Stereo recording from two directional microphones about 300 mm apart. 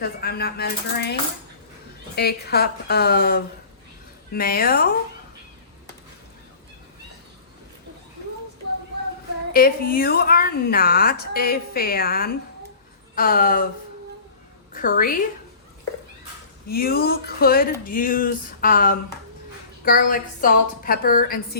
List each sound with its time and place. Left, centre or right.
0.0 s a woman's voice: left
2.1 s a woman's voice: left
9.5 s a woman's voice: left
14.7 s a woman's voice: left
16.6 s a woman's voice: left